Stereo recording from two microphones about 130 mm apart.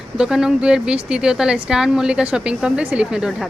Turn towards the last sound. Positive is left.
turn(degrees=-5)  # may be behind; listen again after turning